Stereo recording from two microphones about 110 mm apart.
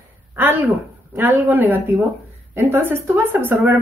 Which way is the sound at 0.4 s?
20° right (ahead or behind).